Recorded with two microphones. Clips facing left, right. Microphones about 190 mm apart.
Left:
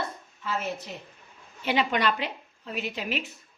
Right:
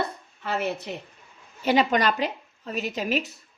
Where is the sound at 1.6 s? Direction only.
40° right (ahead or behind).